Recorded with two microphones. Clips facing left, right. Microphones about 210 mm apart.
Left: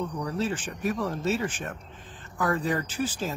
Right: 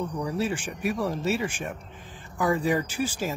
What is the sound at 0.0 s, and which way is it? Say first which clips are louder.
Speech: right 1 dB; 10° right (ahead or behind).